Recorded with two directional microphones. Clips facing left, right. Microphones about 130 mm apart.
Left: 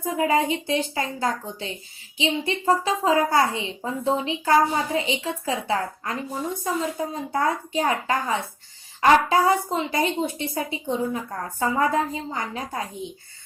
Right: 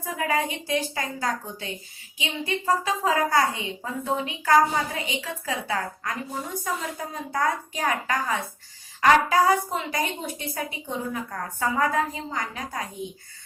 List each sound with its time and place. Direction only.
0.0 s a woman's voice: 25° left (ahead or behind)